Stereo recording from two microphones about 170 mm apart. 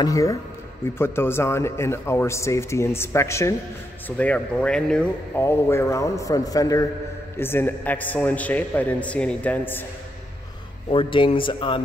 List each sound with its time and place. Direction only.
0.0 s speech: 20° left (ahead or behind)
10.9 s speech: 30° left (ahead or behind)